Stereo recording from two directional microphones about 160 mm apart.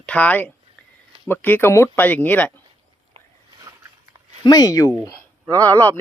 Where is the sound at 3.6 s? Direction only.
20° right (ahead or behind).